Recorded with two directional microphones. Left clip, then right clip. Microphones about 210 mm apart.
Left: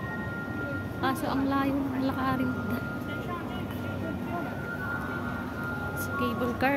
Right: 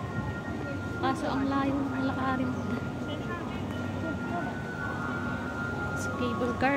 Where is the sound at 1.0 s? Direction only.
15° left (ahead or behind).